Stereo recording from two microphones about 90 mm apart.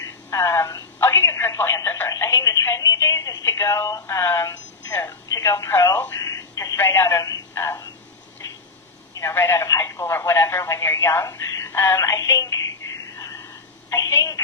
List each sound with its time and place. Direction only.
0.0 s speech: 35° left (ahead or behind)
6.0 s telephone: 35° left (ahead or behind)
6.7 s speech: 30° left (ahead or behind)
9.1 s speech: 30° left (ahead or behind)